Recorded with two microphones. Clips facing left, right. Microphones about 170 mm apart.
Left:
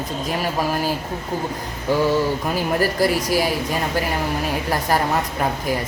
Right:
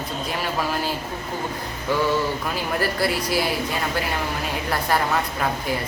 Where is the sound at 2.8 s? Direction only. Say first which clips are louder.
Left 3 dB; 40° left (ahead or behind).